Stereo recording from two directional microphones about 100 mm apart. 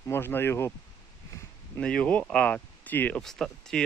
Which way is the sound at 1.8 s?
10° left (ahead or behind).